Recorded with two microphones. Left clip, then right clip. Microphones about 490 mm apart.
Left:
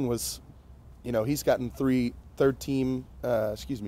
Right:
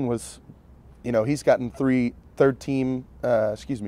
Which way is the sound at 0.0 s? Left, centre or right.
Centre.